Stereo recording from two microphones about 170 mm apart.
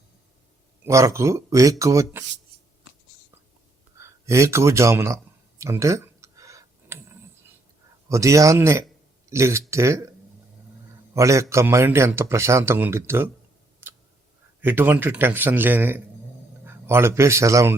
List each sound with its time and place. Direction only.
0.9 s a man's voice: 20° right (ahead or behind)
3.9 s a sound: 15° right (ahead or behind)
8.1 s a man's voice: 20° right (ahead or behind)
13.8 s tick-tock: 10° right (ahead or behind)
14.6 s a man's voice: 10° right (ahead or behind)